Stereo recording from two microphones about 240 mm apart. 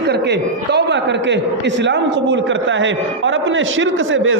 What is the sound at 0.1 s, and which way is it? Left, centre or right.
A man's voice, right.